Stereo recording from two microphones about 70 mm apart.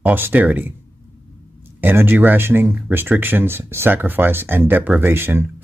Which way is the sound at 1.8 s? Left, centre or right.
Right.